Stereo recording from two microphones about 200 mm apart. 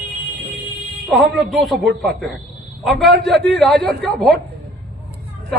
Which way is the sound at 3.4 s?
60° right (ahead or behind).